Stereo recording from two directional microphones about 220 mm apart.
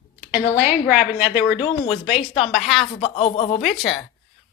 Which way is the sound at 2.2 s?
25° left (ahead or behind).